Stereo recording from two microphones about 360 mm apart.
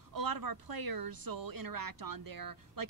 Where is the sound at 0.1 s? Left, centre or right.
Right.